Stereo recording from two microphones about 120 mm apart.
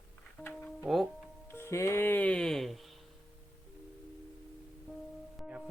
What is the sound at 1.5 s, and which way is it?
Speech, 20° left (ahead or behind).